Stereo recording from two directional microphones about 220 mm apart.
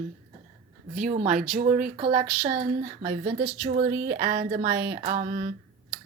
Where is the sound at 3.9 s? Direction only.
45° right (ahead or behind).